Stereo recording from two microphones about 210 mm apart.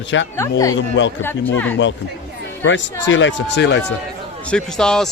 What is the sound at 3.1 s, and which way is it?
Speech, 60° left (ahead or behind).